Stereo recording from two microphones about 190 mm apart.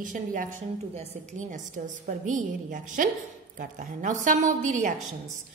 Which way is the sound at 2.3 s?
45° right (ahead or behind).